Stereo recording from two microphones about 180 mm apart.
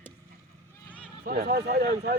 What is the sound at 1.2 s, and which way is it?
Speech, 55° right (ahead or behind).